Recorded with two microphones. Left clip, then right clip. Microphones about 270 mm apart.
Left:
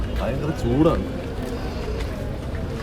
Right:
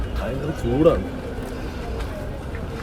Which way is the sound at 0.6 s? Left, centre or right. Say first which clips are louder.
Right 3 dB; centre.